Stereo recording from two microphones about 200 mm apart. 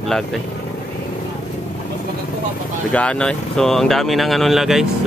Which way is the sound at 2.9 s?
5° left (ahead or behind).